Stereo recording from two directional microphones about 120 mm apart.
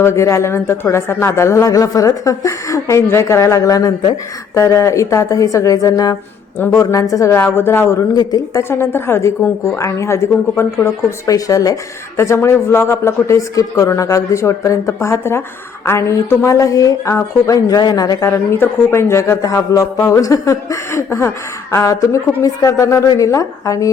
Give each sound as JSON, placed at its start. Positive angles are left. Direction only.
{"t": 0.0, "sound": "speech", "side_deg": 25}
{"t": 8.1, "sound": "speech", "side_deg": 35}
{"t": 18.3, "sound": "speech", "side_deg": 20}